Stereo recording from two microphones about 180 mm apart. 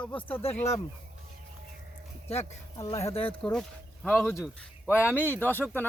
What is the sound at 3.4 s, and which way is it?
A man's voice, 5° left (ahead or behind).